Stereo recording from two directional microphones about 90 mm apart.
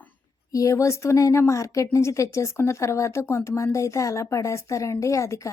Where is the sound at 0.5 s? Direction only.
35° left (ahead or behind).